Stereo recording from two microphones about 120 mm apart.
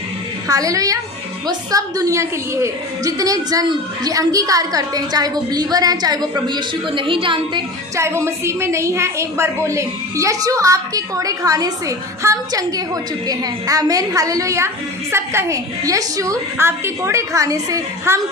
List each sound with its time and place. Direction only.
0.4 s a woman's voice: 30° right (ahead or behind); by 7.6 s 45° right (ahead or behind)
7.9 s a woman's voice: 25° right (ahead or behind)